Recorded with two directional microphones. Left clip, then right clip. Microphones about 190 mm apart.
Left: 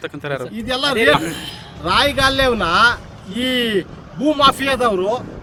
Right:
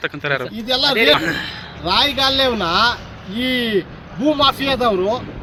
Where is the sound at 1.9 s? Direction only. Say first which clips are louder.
Left 1 dB; 30° left (ahead or behind).